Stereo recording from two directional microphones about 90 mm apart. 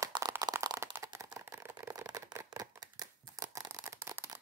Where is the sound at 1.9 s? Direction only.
40° right (ahead or behind).